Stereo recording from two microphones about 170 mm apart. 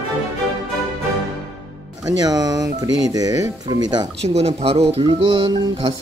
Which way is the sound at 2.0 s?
20° right (ahead or behind).